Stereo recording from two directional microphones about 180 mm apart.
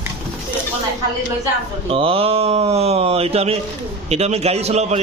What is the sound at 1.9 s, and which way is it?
Speech, 30° right (ahead or behind).